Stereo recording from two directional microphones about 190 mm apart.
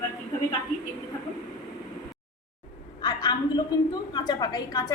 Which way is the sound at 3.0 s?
20° left (ahead or behind).